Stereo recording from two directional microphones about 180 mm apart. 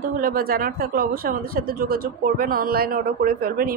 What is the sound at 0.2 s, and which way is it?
Speech, 55° right (ahead or behind).